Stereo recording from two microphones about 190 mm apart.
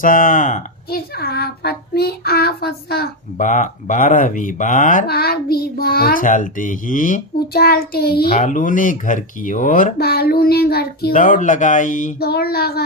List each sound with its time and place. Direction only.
0.0 s a woman's voice: 45° left (ahead or behind)
12.3 s speech: 55° left (ahead or behind)